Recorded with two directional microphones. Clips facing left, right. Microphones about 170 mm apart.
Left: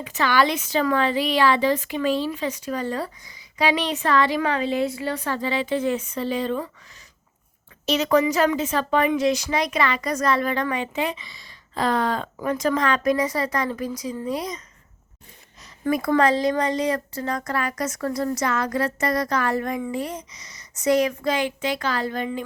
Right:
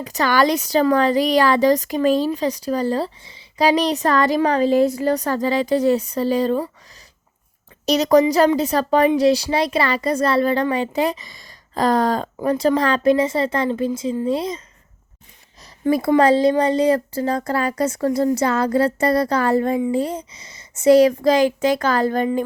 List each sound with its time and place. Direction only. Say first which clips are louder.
0.0 s speech: right 3 dB; 40° right (ahead or behind)
7.9 s speech: right 5 dB; 40° right (ahead or behind)
15.6 s speech: right 5 dB; 30° right (ahead or behind)